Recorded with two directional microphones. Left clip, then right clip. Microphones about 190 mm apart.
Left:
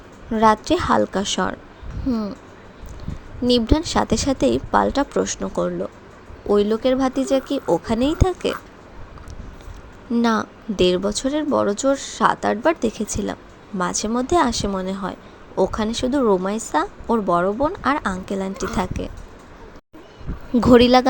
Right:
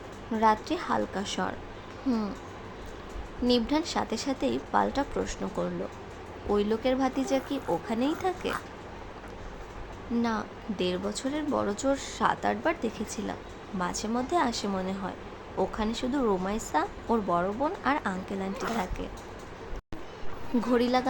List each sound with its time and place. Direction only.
0.3 s speech: 35° left (ahead or behind)
2.0 s speech: 15° left (ahead or behind)
3.4 s speech: 30° left (ahead or behind)
10.2 s speech: 40° left (ahead or behind)
20.6 s speech: 40° left (ahead or behind)